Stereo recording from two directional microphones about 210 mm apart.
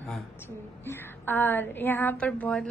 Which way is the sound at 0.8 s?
10° left (ahead or behind).